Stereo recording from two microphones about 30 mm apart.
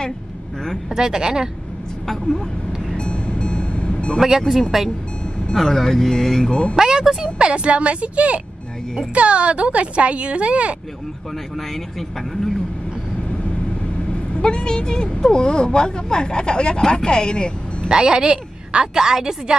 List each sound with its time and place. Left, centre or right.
0.9 s a woman's voice: right
3.0 s music: left
4.5 s speech: centre
5.5 s speech: centre
6.8 s speech: right
14.4 s a woman's voice: left
17.8 s a woman's voice: right
18.9 s a woman's voice: right